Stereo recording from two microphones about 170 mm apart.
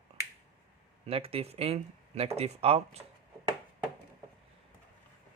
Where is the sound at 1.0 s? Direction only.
35° right (ahead or behind).